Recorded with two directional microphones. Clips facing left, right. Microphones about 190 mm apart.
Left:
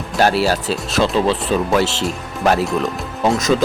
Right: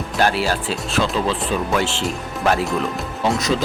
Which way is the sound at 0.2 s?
40° left (ahead or behind).